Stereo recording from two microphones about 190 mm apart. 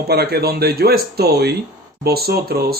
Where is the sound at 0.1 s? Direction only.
55° right (ahead or behind).